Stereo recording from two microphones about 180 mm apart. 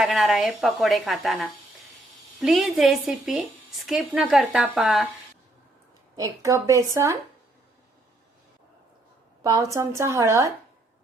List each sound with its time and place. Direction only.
0.0 s a woman's voice: centre (ahead or behind)
6.1 s a woman's voice: 15° right (ahead or behind)
9.4 s a woman's voice: 20° right (ahead or behind)